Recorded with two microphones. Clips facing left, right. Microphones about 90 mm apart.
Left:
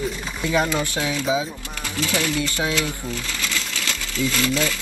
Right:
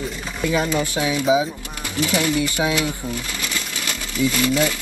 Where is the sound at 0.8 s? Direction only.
20° right (ahead or behind).